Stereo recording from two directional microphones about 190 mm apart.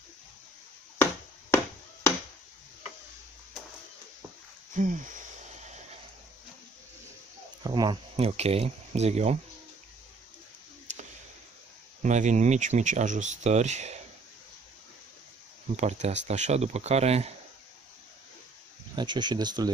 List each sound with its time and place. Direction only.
4.7 s a sound: 40° right (ahead or behind)
7.6 s speech: 20° right (ahead or behind)
12.0 s speech: 40° right (ahead or behind)
15.7 s speech: 35° right (ahead or behind)
18.9 s speech: 25° right (ahead or behind)